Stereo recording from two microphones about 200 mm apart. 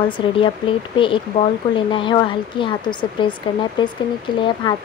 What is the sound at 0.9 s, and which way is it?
Speech, 25° left (ahead or behind).